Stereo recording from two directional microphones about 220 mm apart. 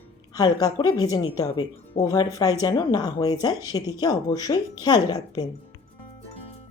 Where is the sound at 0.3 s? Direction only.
15° left (ahead or behind).